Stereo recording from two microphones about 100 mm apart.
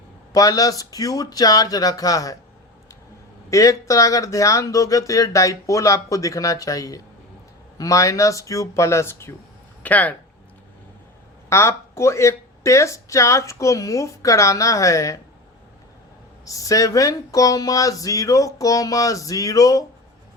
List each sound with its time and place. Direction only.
0.3 s speech: 35° left (ahead or behind)
3.5 s speech: 35° left (ahead or behind)
9.8 s speech: 15° left (ahead or behind)
11.4 s speech: 25° left (ahead or behind)
16.5 s speech: 35° left (ahead or behind)